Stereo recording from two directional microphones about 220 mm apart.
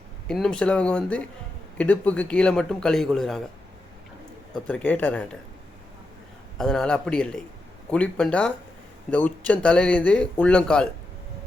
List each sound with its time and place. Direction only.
0.3 s speech: 5° left (ahead or behind)
4.5 s speech: 5° left (ahead or behind)
6.6 s speech: centre (ahead or behind)